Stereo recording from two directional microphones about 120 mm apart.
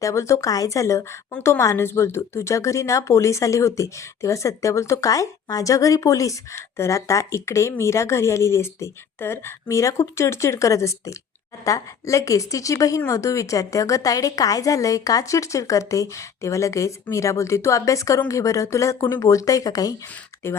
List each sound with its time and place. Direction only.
0.0 s speech: 25° left (ahead or behind)